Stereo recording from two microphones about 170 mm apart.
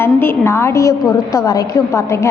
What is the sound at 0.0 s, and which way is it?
A woman's voice, 15° left (ahead or behind).